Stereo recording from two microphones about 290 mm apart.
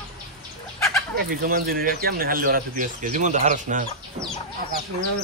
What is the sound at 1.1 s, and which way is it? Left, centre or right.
Speech, right.